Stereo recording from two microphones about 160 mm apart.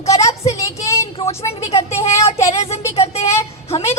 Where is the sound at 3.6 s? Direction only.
40° left (ahead or behind).